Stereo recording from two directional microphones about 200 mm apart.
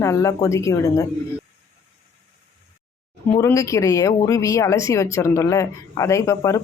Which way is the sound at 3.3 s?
15° left (ahead or behind).